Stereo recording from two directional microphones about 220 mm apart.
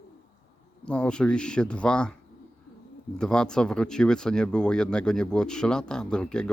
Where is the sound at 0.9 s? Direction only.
5° left (ahead or behind).